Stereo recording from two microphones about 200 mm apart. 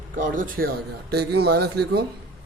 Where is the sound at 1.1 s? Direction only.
55° right (ahead or behind).